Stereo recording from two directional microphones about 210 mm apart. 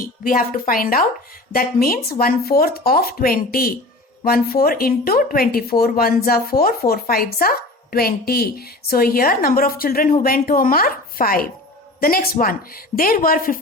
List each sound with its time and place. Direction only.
0.0 s a woman's voice: 40° left (ahead or behind)